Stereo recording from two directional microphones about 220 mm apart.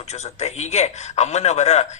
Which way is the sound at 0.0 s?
30° left (ahead or behind).